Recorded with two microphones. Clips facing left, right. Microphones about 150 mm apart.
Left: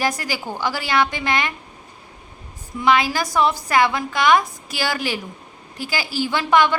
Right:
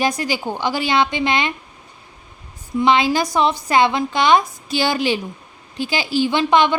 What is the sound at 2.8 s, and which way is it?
A woman's voice, 20° right (ahead or behind).